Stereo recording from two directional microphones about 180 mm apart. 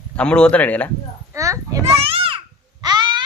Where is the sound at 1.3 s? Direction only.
15° right (ahead or behind).